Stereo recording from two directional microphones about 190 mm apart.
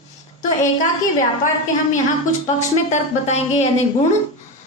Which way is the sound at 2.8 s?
40° left (ahead or behind).